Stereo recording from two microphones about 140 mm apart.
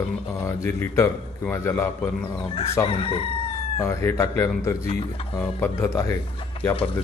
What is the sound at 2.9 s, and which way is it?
Crowing, 40° left (ahead or behind).